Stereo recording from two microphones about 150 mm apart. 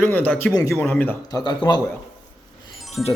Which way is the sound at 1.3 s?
30° left (ahead or behind).